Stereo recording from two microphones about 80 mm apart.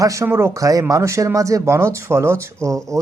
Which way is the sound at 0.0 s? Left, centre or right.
Right.